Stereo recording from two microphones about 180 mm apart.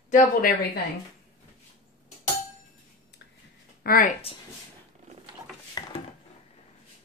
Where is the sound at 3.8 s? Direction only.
55° left (ahead or behind).